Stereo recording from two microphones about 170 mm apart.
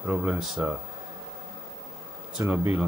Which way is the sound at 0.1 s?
10° right (ahead or behind).